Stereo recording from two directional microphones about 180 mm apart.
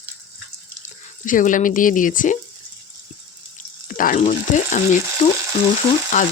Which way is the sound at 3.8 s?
50° left (ahead or behind).